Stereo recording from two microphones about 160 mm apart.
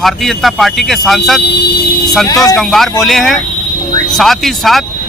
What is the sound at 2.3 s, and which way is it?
Speech, 20° left (ahead or behind).